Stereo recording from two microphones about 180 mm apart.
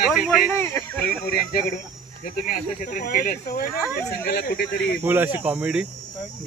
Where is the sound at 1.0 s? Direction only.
55° left (ahead or behind).